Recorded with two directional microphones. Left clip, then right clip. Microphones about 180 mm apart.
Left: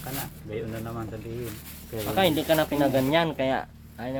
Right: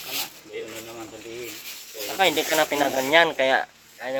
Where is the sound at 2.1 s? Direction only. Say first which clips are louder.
Right 2 dB; 20° right (ahead or behind).